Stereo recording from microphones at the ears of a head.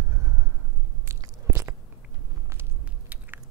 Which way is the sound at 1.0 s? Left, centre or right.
Right.